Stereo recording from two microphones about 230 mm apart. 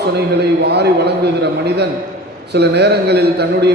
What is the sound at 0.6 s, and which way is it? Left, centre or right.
A man's voice, right.